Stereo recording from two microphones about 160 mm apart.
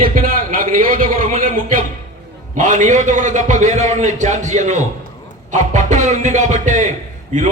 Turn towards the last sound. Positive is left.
turn(degrees=-50)  # may be behind; listen again after turning